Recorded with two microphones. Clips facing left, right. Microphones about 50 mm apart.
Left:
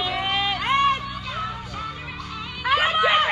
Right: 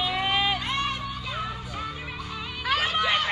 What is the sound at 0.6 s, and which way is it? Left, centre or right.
Music, left.